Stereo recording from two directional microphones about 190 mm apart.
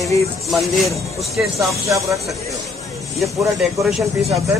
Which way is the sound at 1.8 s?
15° right (ahead or behind).